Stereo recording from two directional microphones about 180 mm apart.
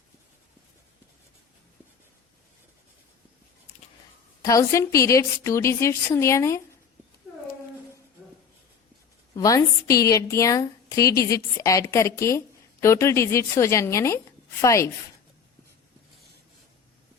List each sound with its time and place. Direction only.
4.4 s a woman's voice: 15° left (ahead or behind)
9.3 s a woman's voice: 15° left (ahead or behind)